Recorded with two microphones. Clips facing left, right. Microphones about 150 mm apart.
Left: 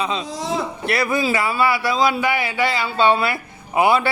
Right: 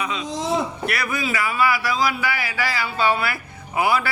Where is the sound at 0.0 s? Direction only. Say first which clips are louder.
Left 2 dB; 30° left (ahead or behind).